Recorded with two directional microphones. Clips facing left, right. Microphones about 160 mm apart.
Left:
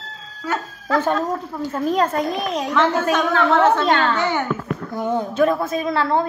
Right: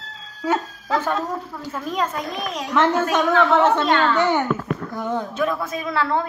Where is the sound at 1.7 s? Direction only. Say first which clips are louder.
Left 6 dB; 35° left (ahead or behind).